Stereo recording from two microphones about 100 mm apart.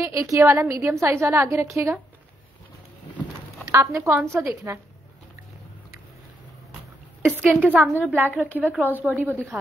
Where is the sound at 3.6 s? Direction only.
30° right (ahead or behind).